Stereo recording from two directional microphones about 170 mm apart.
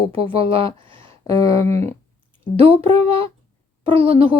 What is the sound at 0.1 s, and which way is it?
Speech, 35° right (ahead or behind).